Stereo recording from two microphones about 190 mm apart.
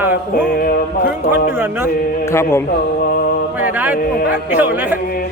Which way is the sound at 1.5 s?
10° right (ahead or behind).